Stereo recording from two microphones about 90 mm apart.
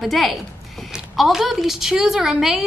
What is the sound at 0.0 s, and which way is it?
A woman's voice, centre (ahead or behind).